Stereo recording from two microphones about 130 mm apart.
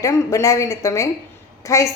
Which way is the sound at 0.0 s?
25° left (ahead or behind).